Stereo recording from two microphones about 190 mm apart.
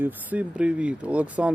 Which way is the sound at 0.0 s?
10° right (ahead or behind).